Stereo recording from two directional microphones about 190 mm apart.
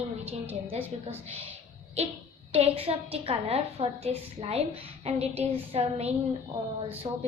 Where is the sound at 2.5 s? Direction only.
30° right (ahead or behind).